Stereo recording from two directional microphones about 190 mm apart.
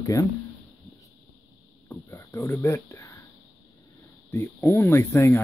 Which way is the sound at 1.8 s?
15° left (ahead or behind).